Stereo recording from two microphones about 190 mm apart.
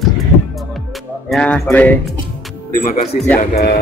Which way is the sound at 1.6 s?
10° left (ahead or behind).